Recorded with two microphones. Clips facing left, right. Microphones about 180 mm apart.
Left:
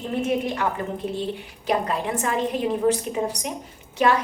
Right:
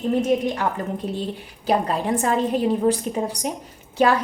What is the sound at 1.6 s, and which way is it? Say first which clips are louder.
Speech: right 3 dB; 35° right (ahead or behind).